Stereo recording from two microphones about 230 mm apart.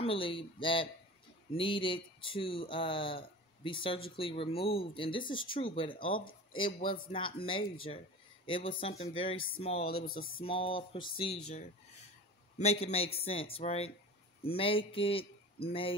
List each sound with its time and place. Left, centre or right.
0.0 s speech: left
10.0 s speech: left
10.4 s a man's voice: left